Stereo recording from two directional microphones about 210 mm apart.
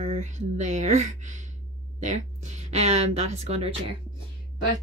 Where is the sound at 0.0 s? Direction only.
30° right (ahead or behind).